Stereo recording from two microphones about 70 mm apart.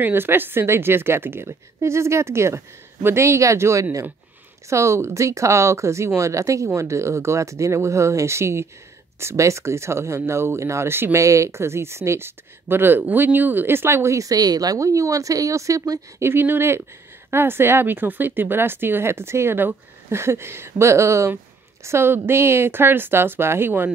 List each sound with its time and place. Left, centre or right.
0.0 s speech: right
16.2 s speech: right